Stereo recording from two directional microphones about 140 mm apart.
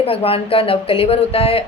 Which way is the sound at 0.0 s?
45° left (ahead or behind).